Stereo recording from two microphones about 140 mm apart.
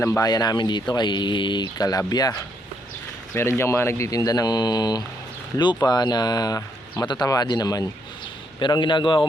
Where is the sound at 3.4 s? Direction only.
20° left (ahead or behind).